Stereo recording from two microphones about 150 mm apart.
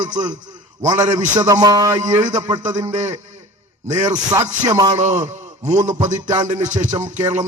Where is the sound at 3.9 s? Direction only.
25° right (ahead or behind).